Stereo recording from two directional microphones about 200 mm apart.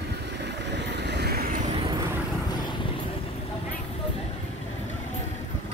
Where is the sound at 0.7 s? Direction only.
60° right (ahead or behind).